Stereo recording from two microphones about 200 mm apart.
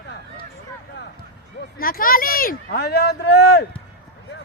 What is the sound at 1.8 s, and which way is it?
Speech, 45° left (ahead or behind).